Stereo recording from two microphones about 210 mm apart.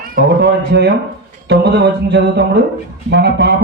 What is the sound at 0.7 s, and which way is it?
A man's voice, 55° right (ahead or behind).